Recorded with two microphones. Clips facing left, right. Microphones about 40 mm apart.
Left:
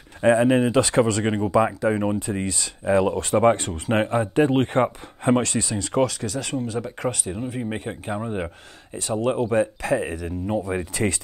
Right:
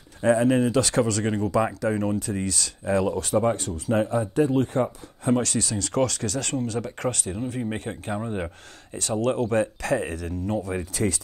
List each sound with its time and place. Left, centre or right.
0.2 s speech: left